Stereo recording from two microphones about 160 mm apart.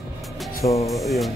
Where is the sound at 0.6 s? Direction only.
20° left (ahead or behind).